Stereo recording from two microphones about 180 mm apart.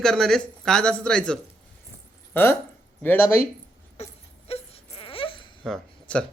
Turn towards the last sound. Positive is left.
turn(degrees=5)  # may be behind; listen again after turning